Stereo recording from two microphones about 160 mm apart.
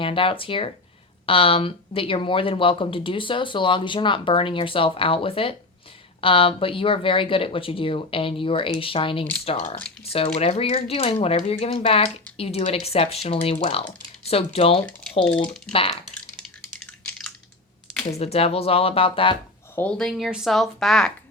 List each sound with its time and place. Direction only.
0.0 s speech: 35° left (ahead or behind)
16.8 s typing: 5° left (ahead or behind)
18.2 s speech: 40° left (ahead or behind)
19.7 s a woman's voice: 5° left (ahead or behind)